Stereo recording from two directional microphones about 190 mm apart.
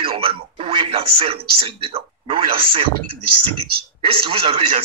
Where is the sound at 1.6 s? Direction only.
30° right (ahead or behind).